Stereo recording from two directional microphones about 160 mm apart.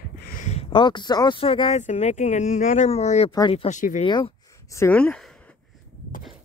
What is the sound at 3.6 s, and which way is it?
Speech, 50° left (ahead or behind).